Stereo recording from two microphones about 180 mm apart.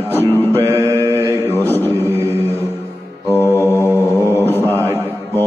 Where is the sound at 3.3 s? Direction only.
15° left (ahead or behind).